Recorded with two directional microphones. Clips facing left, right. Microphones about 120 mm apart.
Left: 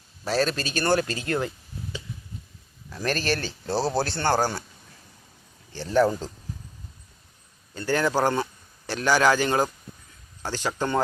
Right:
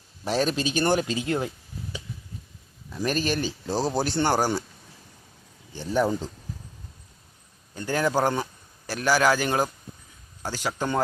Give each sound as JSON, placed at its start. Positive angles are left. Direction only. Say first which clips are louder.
{"t": 0.3, "sound": "speech", "louder": "even", "side_deg": -15}
{"t": 5.7, "sound": "speech", "louder": "left 3 dB", "side_deg": -15}
{"t": 7.8, "sound": "speech", "louder": "left 1 dB", "side_deg": -10}